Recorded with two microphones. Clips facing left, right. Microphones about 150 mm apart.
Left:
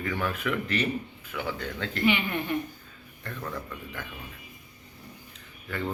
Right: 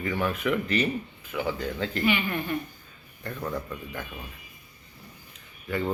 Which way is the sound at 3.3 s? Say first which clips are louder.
Right 4 dB; 20° right (ahead or behind).